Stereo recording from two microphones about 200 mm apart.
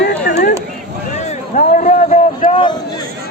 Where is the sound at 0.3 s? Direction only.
40° left (ahead or behind).